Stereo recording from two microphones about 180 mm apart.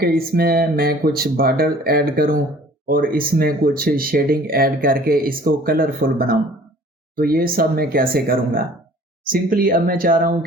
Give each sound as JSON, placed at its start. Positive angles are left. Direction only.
{"t": 0.0, "sound": "speech", "side_deg": -60}